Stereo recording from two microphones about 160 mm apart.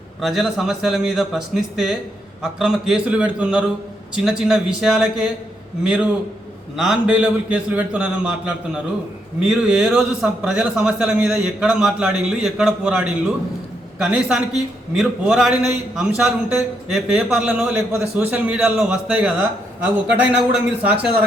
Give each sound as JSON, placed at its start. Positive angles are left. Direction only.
{"t": 0.2, "sound": "a man's voice", "side_deg": 0}